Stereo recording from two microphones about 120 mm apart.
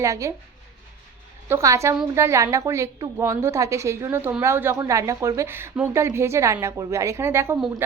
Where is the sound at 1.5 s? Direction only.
25° right (ahead or behind).